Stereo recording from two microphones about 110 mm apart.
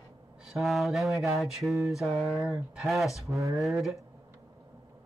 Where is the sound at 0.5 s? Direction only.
Centre (ahead or behind).